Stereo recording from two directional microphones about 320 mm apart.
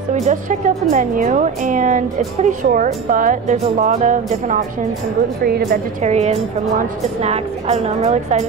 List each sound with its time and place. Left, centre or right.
0.1 s speech: right